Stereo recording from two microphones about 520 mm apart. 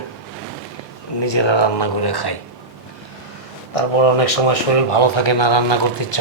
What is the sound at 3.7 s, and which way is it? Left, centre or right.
Speech, left.